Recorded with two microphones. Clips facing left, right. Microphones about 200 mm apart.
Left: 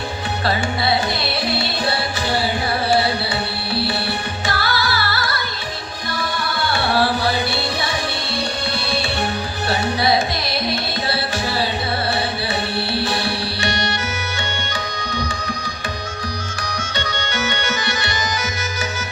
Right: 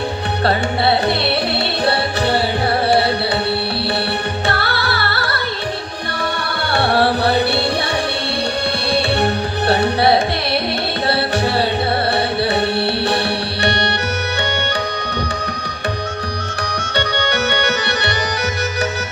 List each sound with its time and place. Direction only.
0.4 s music: 60° right (ahead or behind)
4.4 s music: 60° right (ahead or behind)
6.7 s music: 60° right (ahead or behind)
8.9 s music: 60° right (ahead or behind)
12.7 s music: 60° right (ahead or behind)
16.6 s music: 60° right (ahead or behind)